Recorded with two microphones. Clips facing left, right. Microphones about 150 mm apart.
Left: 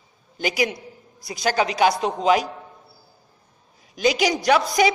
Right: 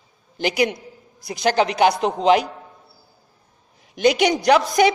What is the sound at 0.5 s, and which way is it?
A man's voice, 60° right (ahead or behind).